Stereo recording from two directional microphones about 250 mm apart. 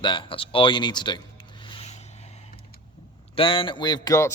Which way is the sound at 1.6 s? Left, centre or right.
Left.